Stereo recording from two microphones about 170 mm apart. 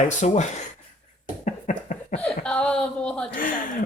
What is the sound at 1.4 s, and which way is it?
Laughter, 50° left (ahead or behind).